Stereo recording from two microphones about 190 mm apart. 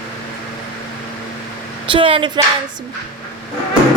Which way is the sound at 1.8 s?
30° right (ahead or behind).